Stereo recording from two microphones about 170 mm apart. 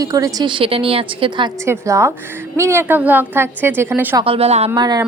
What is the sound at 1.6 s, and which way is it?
A woman's voice, 15° right (ahead or behind).